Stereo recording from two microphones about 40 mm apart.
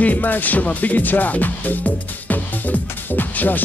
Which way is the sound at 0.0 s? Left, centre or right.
Left.